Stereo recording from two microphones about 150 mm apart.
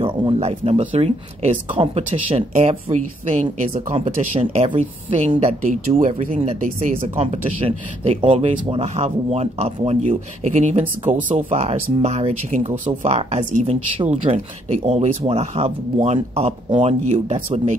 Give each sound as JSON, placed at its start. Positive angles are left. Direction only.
{"t": 0.0, "sound": "speech", "side_deg": -35}
{"t": 7.2, "sound": "speech", "side_deg": -45}
{"t": 12.5, "sound": "speech", "side_deg": -55}